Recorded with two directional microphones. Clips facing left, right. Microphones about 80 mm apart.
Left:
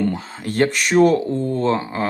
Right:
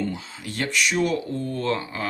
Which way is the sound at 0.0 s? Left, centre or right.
Left.